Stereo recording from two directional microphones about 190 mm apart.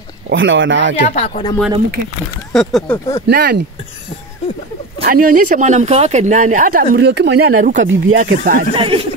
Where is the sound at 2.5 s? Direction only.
Centre (ahead or behind).